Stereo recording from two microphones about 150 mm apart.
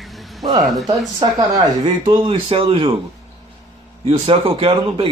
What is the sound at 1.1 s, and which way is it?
Speech, 25° right (ahead or behind).